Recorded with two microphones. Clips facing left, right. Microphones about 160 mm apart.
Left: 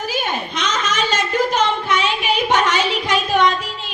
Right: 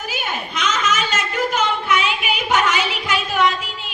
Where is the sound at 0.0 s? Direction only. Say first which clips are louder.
Left 4 dB; 35° left (ahead or behind).